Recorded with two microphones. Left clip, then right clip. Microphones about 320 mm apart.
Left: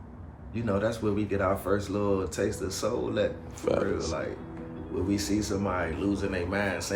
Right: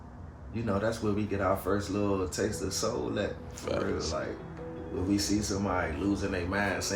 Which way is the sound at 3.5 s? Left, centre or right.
Centre.